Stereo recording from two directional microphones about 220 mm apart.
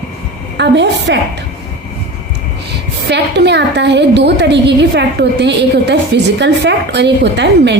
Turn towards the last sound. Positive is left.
turn(degrees=-50)  # may be behind; listen again after turning